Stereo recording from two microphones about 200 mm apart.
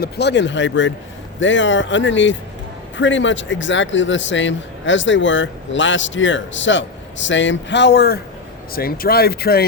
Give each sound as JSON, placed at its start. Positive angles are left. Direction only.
{"t": 0.0, "sound": "speech", "side_deg": 60}